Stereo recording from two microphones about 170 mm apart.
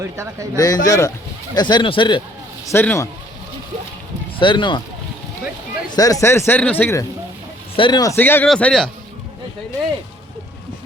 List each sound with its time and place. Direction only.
0.0 s speech: 15° right (ahead or behind)
0.5 s a man's voice: 20° left (ahead or behind)
2.6 s speech: 15° left (ahead or behind)
4.4 s speech: 30° left (ahead or behind)
5.9 s speech: 20° left (ahead or behind)
7.8 s a man's voice: 25° left (ahead or behind)
8.1 s a man's voice: 10° left (ahead or behind)